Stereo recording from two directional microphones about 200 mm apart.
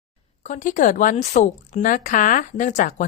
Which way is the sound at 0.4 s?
40° left (ahead or behind).